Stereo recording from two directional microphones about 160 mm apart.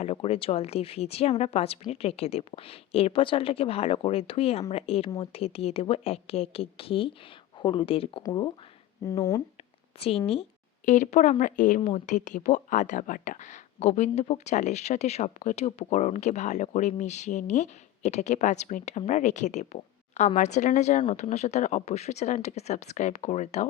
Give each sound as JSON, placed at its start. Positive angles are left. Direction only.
{"t": 0.0, "sound": "speech", "side_deg": 40}
{"t": 10.0, "sound": "speech", "side_deg": 35}
{"t": 10.8, "sound": "speech", "side_deg": 50}
{"t": 11.8, "sound": "speech", "side_deg": 35}
{"t": 12.0, "sound": "speech", "side_deg": 50}